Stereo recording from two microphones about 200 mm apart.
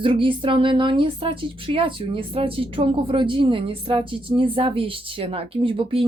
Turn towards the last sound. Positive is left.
turn(degrees=-25)  # may be behind; listen again after turning